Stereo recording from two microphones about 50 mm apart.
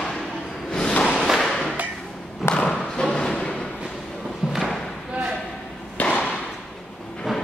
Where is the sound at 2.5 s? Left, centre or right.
Centre.